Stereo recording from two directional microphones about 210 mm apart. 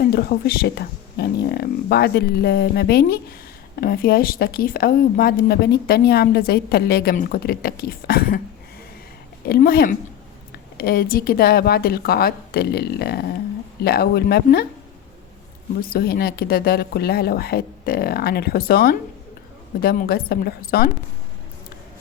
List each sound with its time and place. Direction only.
0.0 s speech: 45° left (ahead or behind)
9.5 s speech: 45° left (ahead or behind)
15.8 s speech: 45° left (ahead or behind)